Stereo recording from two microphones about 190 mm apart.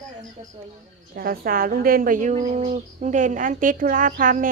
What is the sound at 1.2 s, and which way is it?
A woman's voice, 50° right (ahead or behind).